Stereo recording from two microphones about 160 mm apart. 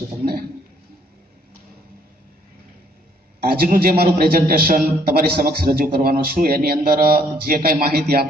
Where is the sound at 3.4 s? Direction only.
65° right (ahead or behind).